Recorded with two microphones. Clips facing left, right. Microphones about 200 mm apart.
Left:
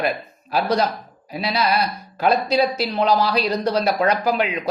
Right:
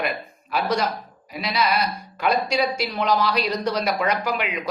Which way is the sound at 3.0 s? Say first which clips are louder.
Left 3 dB; 35° left (ahead or behind).